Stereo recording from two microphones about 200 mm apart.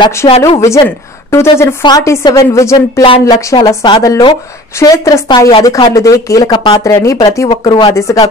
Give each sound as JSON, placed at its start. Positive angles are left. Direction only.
{"t": 0.0, "sound": "a woman's voice", "side_deg": 15}